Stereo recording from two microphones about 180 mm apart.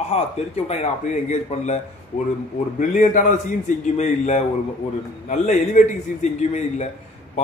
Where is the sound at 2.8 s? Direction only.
45° left (ahead or behind).